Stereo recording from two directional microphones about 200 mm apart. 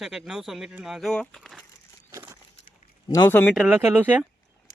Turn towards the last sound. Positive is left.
turn(degrees=-10)  # may be behind; listen again after turning